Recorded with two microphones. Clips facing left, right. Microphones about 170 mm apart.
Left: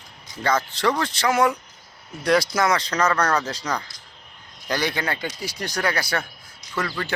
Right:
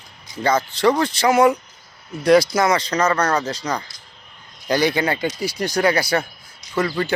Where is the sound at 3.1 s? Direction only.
10° right (ahead or behind).